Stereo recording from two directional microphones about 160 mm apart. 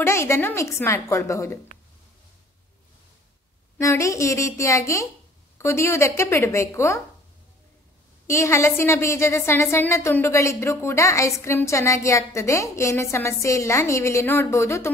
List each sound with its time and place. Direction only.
0.0 s a woman's voice: 15° left (ahead or behind)
3.7 s a woman's voice: 15° left (ahead or behind)
8.3 s a woman's voice: 15° left (ahead or behind)